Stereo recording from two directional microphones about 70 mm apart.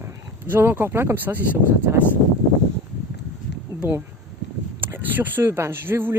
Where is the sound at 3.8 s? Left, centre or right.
Right.